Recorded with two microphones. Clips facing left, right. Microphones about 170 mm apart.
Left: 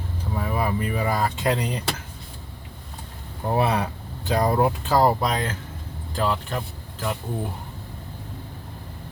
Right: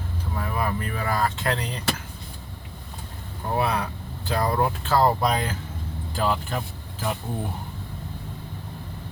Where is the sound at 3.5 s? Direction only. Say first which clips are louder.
Left 2 dB; 20° left (ahead or behind).